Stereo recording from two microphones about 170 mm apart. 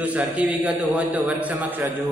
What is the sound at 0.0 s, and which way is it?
A man's voice, 10° right (ahead or behind).